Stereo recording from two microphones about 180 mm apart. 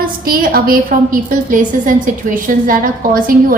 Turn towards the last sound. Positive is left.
turn(degrees=-50)  # may be behind; listen again after turning